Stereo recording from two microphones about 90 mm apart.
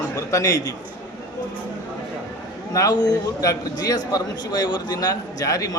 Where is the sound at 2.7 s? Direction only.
45° left (ahead or behind).